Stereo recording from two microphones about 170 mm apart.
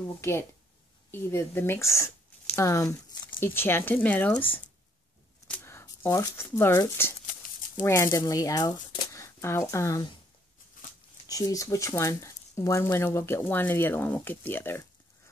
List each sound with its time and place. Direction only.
0.2 s speech: 15° left (ahead or behind)
11.2 s speech: 20° left (ahead or behind)